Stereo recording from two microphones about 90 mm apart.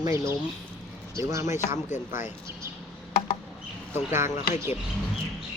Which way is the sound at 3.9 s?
30° right (ahead or behind).